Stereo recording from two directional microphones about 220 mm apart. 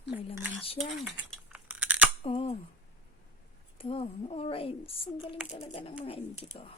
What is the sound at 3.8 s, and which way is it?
Speech, 25° left (ahead or behind).